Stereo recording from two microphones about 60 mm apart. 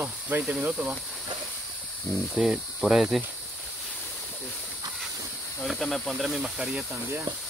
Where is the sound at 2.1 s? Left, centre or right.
Centre.